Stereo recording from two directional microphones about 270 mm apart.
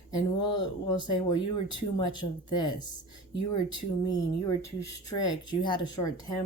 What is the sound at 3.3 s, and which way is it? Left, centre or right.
Speech, left.